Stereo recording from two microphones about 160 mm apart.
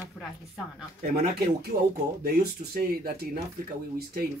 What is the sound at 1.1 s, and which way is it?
Speech, 75° right (ahead or behind).